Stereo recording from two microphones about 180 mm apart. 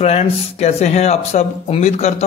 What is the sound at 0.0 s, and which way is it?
Speech, 35° left (ahead or behind).